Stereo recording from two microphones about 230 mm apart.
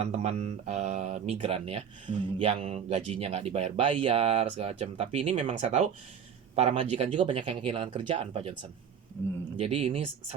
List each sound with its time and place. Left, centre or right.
0.0 s speech: right